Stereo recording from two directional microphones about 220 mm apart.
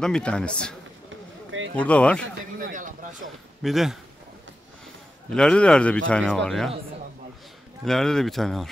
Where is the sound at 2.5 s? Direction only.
35° right (ahead or behind).